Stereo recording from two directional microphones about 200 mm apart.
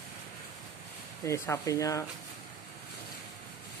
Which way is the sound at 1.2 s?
15° left (ahead or behind).